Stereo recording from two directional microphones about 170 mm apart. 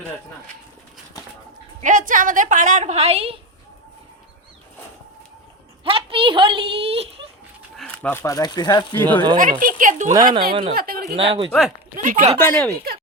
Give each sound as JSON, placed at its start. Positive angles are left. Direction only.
{"t": 1.2, "sound": "a sound", "side_deg": 20}
{"t": 1.8, "sound": "a woman's voice", "side_deg": -50}
{"t": 5.8, "sound": "a woman's voice", "side_deg": -30}
{"t": 7.8, "sound": "speech", "side_deg": 5}
{"t": 9.4, "sound": "a woman's voice", "side_deg": -50}
{"t": 10.5, "sound": "a woman's voice", "side_deg": -35}
{"t": 10.8, "sound": "speech", "side_deg": -60}
{"t": 11.2, "sound": "a woman's voice", "side_deg": -35}
{"t": 12.0, "sound": "a woman's voice", "side_deg": -50}
{"t": 12.4, "sound": "speech", "side_deg": 10}